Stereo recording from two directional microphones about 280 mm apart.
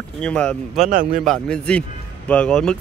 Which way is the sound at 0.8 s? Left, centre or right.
Right.